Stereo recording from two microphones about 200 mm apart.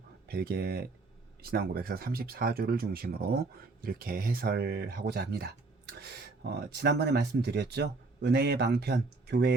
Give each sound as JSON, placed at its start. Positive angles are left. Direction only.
{"t": 0.3, "sound": "speech", "side_deg": -50}